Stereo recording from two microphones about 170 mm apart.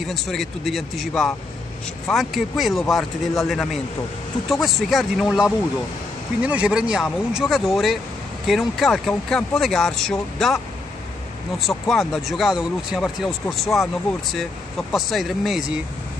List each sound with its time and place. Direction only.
0.0 s speech: centre (ahead or behind)
11.6 s speech: centre (ahead or behind)
15.0 s speech: centre (ahead or behind)